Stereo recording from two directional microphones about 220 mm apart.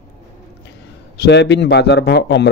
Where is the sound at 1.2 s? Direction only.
50° left (ahead or behind).